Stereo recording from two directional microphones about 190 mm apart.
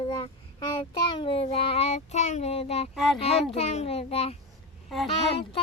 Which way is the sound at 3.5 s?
35° left (ahead or behind).